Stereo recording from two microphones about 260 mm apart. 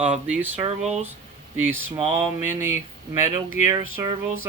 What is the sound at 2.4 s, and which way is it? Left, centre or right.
Speech, centre.